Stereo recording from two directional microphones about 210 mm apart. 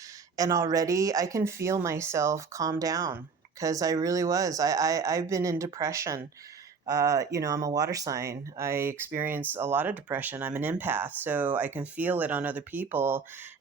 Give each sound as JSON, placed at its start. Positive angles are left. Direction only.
{"t": 0.3, "sound": "speech", "side_deg": -15}